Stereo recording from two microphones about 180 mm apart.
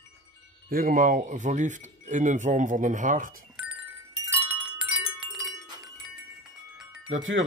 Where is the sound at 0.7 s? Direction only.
50° right (ahead or behind).